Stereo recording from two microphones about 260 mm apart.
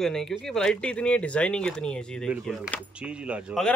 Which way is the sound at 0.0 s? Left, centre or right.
Centre.